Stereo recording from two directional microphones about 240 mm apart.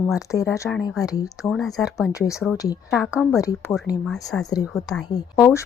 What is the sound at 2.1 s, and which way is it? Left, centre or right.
A woman's voice, centre.